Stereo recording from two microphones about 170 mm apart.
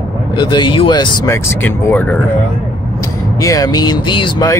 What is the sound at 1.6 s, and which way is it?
Speech, 10° left (ahead or behind).